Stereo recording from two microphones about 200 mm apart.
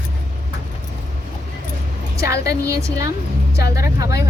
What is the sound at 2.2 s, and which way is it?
A woman's voice, 15° right (ahead or behind).